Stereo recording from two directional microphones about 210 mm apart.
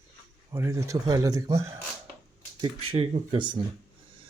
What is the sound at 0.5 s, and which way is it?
Speech, 15° right (ahead or behind).